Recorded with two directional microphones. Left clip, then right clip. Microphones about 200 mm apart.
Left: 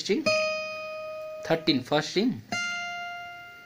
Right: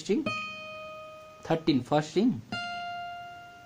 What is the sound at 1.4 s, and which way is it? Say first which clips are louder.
Speech: left 2 dB; 5° left (ahead or behind).